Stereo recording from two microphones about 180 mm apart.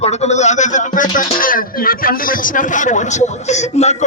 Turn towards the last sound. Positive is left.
turn(degrees=40)  # may be behind; listen again after turning